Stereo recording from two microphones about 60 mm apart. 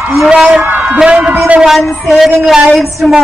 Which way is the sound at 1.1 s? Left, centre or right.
Right.